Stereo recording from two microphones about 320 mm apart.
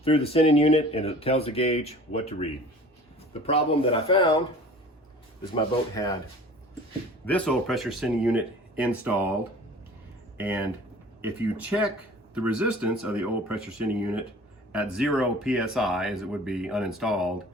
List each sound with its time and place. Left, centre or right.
0.0 s speech: centre
5.5 s speech: centre
7.3 s speech: centre
10.3 s speech: centre